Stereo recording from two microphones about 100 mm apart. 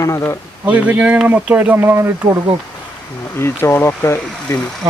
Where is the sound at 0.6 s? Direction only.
15° right (ahead or behind).